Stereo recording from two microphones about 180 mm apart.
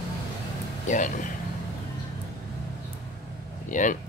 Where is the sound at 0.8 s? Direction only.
45° left (ahead or behind).